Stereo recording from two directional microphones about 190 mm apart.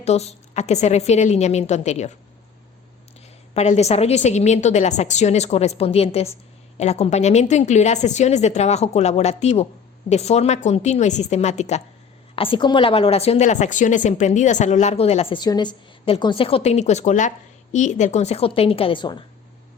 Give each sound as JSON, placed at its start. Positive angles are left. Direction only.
{"t": 0.0, "sound": "a woman's voice", "side_deg": 35}
{"t": 3.5, "sound": "a woman's voice", "side_deg": 35}
{"t": 12.4, "sound": "a woman's voice", "side_deg": 25}